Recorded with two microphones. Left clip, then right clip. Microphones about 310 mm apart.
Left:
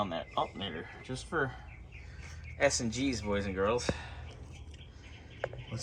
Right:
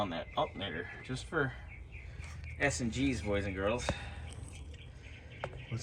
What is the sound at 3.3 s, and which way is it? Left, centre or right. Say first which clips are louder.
Speech: left 5 dB; centre.